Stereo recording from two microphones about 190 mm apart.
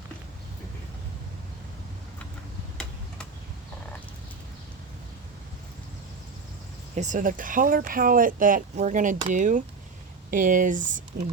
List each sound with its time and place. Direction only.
6.9 s speech: 40° right (ahead or behind)